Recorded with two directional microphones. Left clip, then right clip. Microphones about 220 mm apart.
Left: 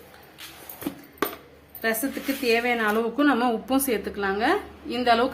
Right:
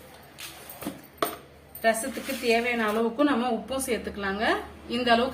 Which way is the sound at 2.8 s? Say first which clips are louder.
Left 2 dB; 50° left (ahead or behind).